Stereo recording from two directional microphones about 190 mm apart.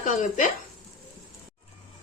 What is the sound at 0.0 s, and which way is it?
Speech, 40° left (ahead or behind).